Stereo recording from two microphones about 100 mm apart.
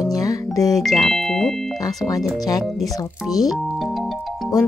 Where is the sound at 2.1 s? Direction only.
40° left (ahead or behind).